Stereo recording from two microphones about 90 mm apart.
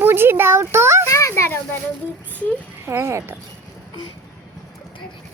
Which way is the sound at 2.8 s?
30° right (ahead or behind).